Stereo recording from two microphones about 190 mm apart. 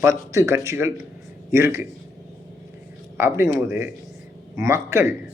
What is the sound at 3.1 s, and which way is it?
Speech, 10° right (ahead or behind).